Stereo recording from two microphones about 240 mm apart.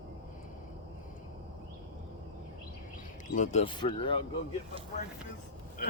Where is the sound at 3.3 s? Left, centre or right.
Left.